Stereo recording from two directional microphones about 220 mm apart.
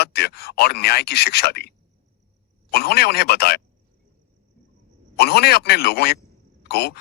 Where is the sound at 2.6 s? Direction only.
45° left (ahead or behind).